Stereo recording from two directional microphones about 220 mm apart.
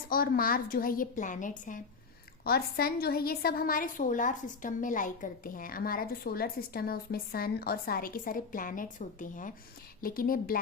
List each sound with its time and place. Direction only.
0.1 s a woman's voice: 40° left (ahead or behind)